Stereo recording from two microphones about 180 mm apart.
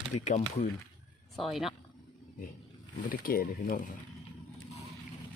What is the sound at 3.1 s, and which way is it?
Speech, 55° left (ahead or behind).